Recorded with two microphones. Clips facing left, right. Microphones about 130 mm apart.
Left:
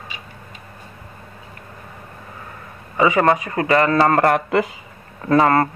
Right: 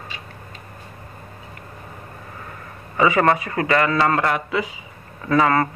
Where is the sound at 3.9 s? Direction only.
45° left (ahead or behind).